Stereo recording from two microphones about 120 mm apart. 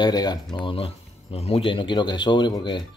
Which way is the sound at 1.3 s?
55° left (ahead or behind).